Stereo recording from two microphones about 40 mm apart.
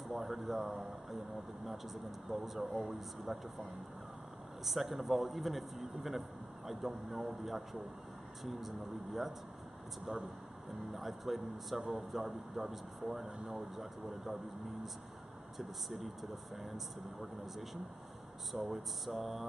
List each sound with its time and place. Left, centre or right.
0.1 s speech: centre
2.2 s speech: centre
4.6 s speech: centre
11.0 s speech: centre
13.2 s speech: right
15.5 s speech: centre